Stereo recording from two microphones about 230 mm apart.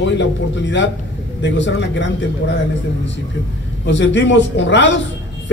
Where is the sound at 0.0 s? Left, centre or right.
Left.